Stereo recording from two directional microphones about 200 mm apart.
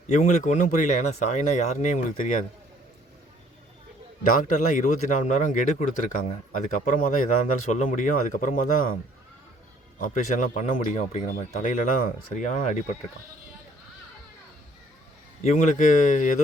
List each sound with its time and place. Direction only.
0.1 s speech: 35° left (ahead or behind)
4.4 s speech: 40° left (ahead or behind)
6.7 s speech: 40° left (ahead or behind)
10.0 s speech: 40° left (ahead or behind)
15.4 s speech: 40° left (ahead or behind)